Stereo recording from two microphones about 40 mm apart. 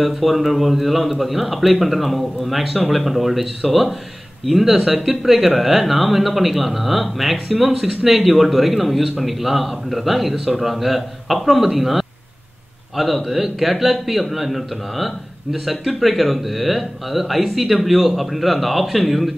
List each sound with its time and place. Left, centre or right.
0.0 s speech: centre